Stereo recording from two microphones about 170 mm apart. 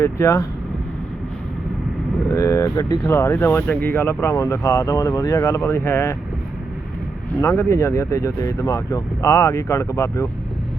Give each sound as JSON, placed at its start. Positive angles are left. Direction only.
{"t": 0.0, "sound": "speech", "side_deg": 15}
{"t": 2.3, "sound": "speech", "side_deg": 20}
{"t": 7.4, "sound": "speech", "side_deg": 15}